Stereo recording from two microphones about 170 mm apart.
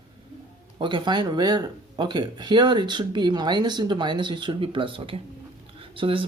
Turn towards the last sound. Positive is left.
turn(degrees=-30)  # may be behind; listen again after turning